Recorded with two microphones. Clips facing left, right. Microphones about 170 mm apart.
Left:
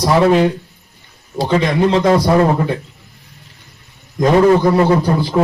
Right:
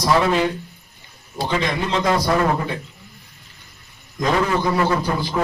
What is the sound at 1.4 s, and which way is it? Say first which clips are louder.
Speech: left 8 dB; 35° left (ahead or behind).